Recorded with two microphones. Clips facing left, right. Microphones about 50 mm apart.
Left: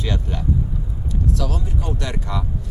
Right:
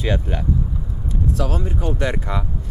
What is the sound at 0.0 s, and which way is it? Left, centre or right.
Speech, right.